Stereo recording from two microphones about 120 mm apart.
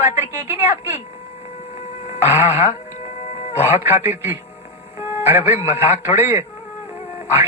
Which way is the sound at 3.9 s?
65° left (ahead or behind).